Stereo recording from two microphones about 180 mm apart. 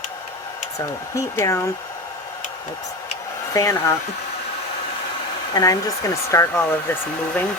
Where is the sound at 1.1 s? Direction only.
15° left (ahead or behind).